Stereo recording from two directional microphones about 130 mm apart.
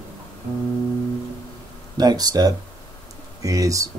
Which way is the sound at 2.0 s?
30° right (ahead or behind).